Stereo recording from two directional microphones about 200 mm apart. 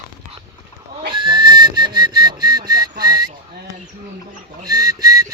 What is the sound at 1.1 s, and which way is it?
Whistling, 25° right (ahead or behind).